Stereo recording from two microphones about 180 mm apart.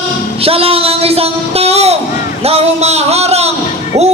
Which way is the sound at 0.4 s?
30° right (ahead or behind).